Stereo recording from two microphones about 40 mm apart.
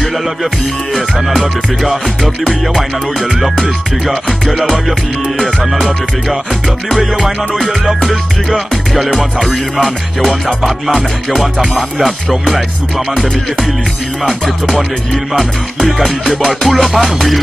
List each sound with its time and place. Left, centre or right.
0.9 s music: centre
6.9 s music: centre
15.3 s music: centre